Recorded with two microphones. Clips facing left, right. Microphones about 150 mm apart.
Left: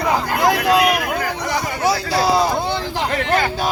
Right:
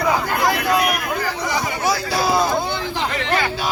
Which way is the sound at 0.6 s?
80° left.